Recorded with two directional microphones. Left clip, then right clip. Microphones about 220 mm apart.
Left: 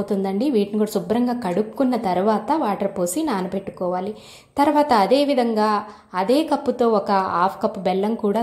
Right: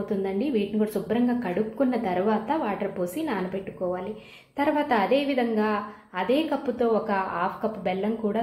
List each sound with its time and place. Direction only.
0.2 s a woman's voice: 30° left (ahead or behind)
4.6 s a woman's voice: 30° left (ahead or behind)